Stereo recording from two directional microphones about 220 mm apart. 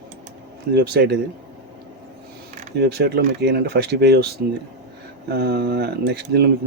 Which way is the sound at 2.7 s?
45° right (ahead or behind).